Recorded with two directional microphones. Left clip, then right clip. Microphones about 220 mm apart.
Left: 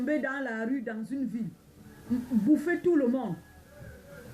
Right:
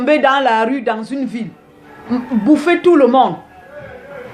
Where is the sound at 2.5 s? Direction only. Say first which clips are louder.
Right 16 dB; 65° right (ahead or behind).